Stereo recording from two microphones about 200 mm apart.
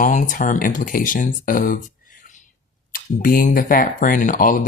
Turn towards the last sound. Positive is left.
turn(degrees=45)  # may be behind; listen again after turning